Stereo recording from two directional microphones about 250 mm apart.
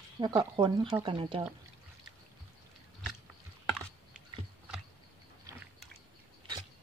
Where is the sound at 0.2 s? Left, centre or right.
Centre.